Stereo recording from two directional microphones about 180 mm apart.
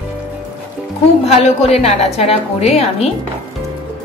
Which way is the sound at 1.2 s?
35° left (ahead or behind).